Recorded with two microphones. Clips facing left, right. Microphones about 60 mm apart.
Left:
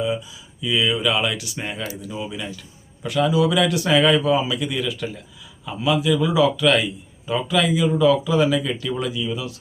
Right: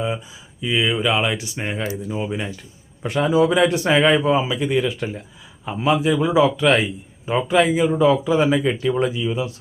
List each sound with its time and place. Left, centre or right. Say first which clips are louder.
0.6 s a man's voice: right 1 dB; right